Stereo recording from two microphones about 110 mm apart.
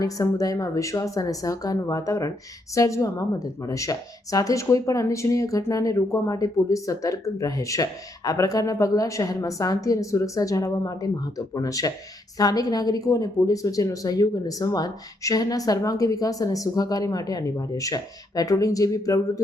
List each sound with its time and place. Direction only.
0.0 s a woman's voice: 30° left (ahead or behind)